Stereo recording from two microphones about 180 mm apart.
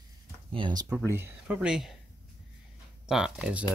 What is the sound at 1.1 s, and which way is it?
Speech, 10° right (ahead or behind).